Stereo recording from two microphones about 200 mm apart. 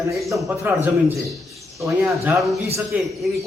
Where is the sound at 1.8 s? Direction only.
15° right (ahead or behind).